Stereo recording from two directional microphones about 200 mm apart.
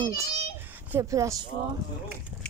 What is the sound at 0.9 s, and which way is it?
Speech, 15° right (ahead or behind).